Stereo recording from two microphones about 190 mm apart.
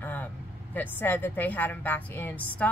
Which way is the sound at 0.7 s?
10° left (ahead or behind).